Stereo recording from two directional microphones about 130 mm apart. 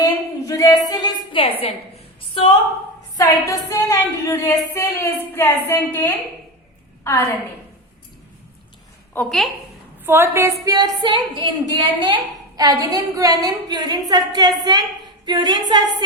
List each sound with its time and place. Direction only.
0.4 s a sound: 25° left (ahead or behind); by 1.5 s 40° left (ahead or behind)
2.3 s a woman's voice: 40° left (ahead or behind)
3.2 s a sound: 25° left (ahead or behind)
7.0 s a woman's voice: 20° left (ahead or behind)
10.1 s a woman's voice: 20° right (ahead or behind)
10.8 s a woman's voice: 35° right (ahead or behind)